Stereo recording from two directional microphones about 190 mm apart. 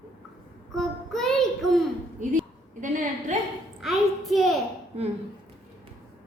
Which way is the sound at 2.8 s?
40° right (ahead or behind).